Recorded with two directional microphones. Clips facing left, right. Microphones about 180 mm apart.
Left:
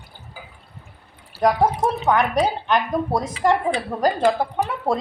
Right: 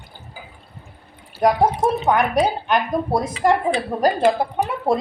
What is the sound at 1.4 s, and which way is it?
Speech, 10° right (ahead or behind).